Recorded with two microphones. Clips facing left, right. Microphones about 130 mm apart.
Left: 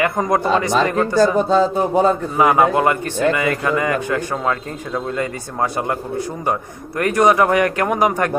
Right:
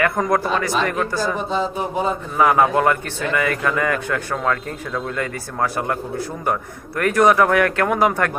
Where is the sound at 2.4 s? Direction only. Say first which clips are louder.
Left 1 dB; 15° left (ahead or behind).